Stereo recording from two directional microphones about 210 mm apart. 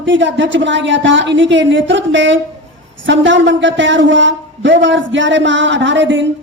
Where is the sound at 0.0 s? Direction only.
60° right (ahead or behind).